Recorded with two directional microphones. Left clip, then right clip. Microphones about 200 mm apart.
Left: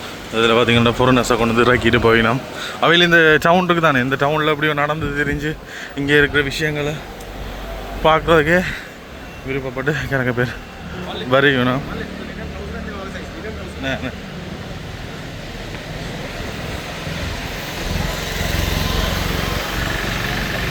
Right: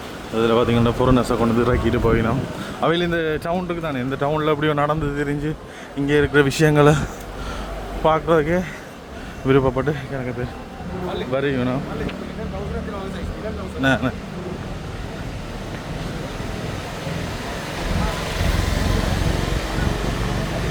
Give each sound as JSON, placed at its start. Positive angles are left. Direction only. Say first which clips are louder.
{"t": 0.3, "sound": "speech", "louder": "left 4 dB", "side_deg": -10}
{"t": 6.3, "sound": "speech", "louder": "right 3 dB", "side_deg": -25}
{"t": 8.0, "sound": "speech", "louder": "left 4 dB", "side_deg": -10}
{"t": 9.5, "sound": "speech", "louder": "right 7 dB", "side_deg": -30}
{"t": 9.7, "sound": "speech", "louder": "left 2 dB", "side_deg": -10}
{"t": 10.1, "sound": "speech", "louder": "left 8 dB", "side_deg": 0}
{"t": 13.8, "sound": "speech", "louder": "right 5 dB", "side_deg": -30}